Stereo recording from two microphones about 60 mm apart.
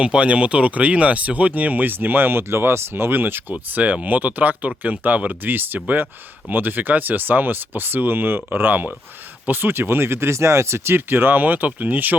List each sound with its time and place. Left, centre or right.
0.0 s speech: centre; by 3.4 s right
3.5 s speech: right